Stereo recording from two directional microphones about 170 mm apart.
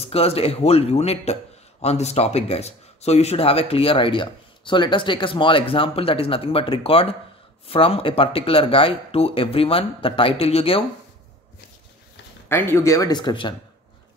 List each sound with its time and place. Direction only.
0.0 s a man's voice: 35° left (ahead or behind)
12.4 s speech: 15° left (ahead or behind)